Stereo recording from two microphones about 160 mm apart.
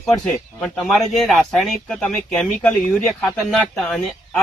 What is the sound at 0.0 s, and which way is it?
Speech, 5° left (ahead or behind).